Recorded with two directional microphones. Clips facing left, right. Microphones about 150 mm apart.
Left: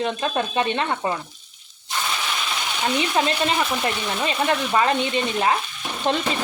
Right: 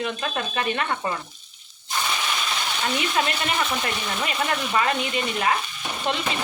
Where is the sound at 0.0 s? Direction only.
30° left (ahead or behind).